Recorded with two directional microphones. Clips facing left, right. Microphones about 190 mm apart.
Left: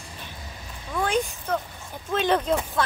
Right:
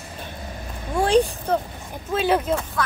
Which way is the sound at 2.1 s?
5° right (ahead or behind).